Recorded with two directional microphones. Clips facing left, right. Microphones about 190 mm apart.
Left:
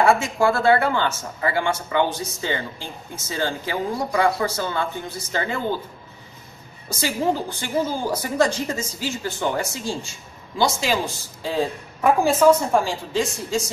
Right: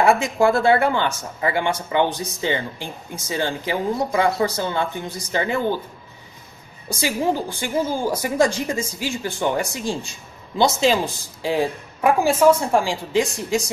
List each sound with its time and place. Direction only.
0.0 s speech: 20° right (ahead or behind)
6.9 s speech: 10° right (ahead or behind)